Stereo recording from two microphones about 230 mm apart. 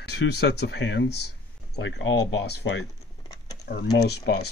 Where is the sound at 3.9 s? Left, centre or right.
Left.